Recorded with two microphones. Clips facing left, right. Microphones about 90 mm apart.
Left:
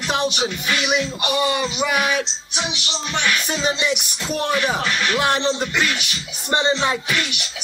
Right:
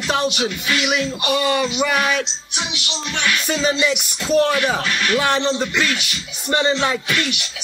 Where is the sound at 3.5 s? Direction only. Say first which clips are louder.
Right 3 dB; 5° left (ahead or behind).